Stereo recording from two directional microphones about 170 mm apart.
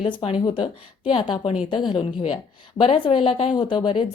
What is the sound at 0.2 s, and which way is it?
Speech, 35° left (ahead or behind).